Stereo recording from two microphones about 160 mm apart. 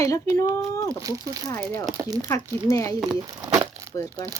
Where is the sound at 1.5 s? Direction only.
15° left (ahead or behind).